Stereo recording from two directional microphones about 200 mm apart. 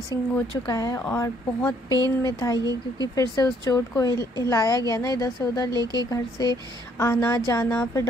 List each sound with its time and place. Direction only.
0.1 s speech: 20° left (ahead or behind)